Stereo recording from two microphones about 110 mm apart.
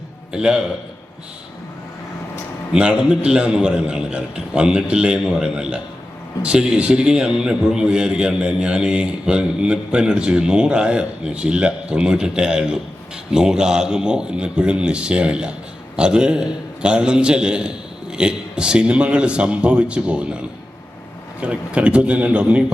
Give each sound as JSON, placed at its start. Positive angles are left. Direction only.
{"t": 0.3, "sound": "a man's voice", "side_deg": -5}
{"t": 2.7, "sound": "a man's voice", "side_deg": -10}
{"t": 21.4, "sound": "a man's voice", "side_deg": -10}